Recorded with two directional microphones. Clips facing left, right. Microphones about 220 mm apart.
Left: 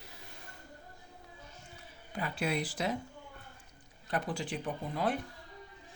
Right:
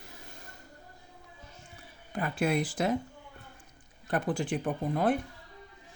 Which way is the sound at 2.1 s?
50° right (ahead or behind).